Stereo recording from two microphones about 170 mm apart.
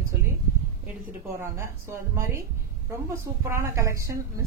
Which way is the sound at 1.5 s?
15° right (ahead or behind).